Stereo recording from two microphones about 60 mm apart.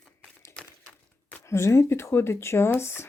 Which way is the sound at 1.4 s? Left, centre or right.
Left.